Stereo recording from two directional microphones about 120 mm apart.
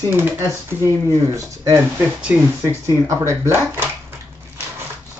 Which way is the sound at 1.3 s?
25° right (ahead or behind).